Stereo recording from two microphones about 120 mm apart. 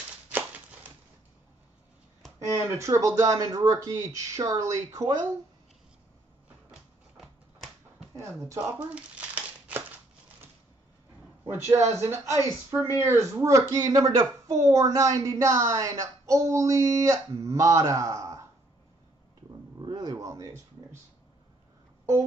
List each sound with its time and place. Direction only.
2.5 s speech: 20° right (ahead or behind)
8.5 s speech: 25° right (ahead or behind)
8.9 s crumpling: 15° right (ahead or behind)
11.5 s speech: 20° right (ahead or behind)
19.8 s speech: 35° right (ahead or behind)